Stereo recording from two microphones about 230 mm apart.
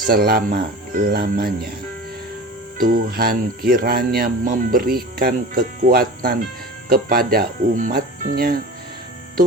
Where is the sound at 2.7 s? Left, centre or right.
Right.